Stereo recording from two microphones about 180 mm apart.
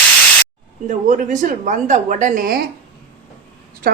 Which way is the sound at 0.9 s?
45° right (ahead or behind).